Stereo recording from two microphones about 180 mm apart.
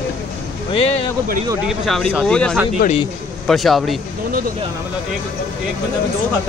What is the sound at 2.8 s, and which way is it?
Speech, 55° left (ahead or behind).